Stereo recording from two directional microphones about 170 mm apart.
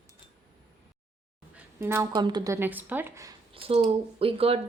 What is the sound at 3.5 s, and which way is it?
Speech, 35° right (ahead or behind).